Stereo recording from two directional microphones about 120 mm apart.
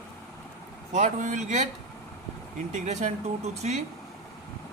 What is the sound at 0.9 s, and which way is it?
Speech, 90° right.